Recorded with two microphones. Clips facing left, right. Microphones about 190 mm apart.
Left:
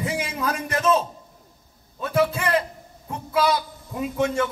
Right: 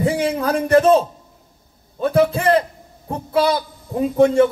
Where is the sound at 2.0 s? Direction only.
35° right (ahead or behind).